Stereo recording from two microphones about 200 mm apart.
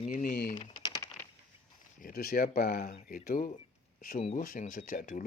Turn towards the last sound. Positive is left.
turn(degrees=40)  # may be behind; listen again after turning